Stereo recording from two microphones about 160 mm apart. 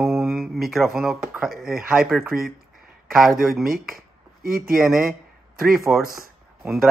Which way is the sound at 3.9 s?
65° right (ahead or behind).